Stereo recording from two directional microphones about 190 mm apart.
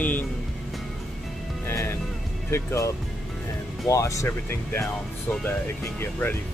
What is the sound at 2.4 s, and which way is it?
Speech, 15° left (ahead or behind).